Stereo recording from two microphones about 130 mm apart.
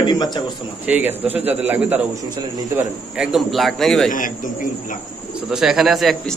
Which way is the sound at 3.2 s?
Centre (ahead or behind).